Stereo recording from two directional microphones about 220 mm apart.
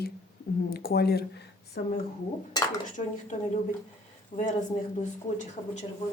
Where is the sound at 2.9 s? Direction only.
35° left (ahead or behind).